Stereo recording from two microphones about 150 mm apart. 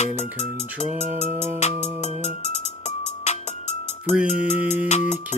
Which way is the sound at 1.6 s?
50° left (ahead or behind).